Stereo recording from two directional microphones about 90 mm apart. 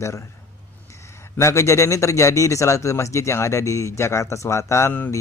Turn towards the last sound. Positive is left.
turn(degrees=30)  # may be behind; listen again after turning